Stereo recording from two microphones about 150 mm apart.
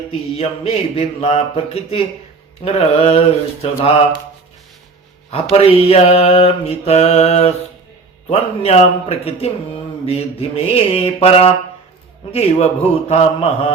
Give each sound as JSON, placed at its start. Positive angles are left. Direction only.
{"t": 0.1, "sound": "mantra", "side_deg": 40}
{"t": 5.3, "sound": "mantra", "side_deg": 40}